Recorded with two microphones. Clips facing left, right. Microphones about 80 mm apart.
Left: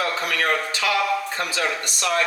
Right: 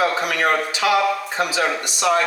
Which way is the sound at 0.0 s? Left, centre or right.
Centre.